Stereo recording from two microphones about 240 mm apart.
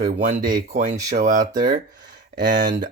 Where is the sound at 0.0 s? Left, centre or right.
Right.